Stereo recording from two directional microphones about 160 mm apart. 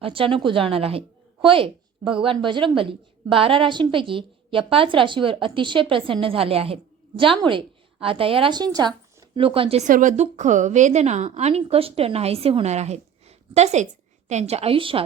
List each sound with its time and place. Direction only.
0.0 s a woman's voice: 35° right (ahead or behind)
9.9 s a woman's voice: 55° right (ahead or behind); by 15.0 s 35° right (ahead or behind)